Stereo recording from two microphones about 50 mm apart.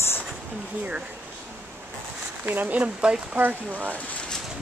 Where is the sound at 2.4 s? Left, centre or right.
Right.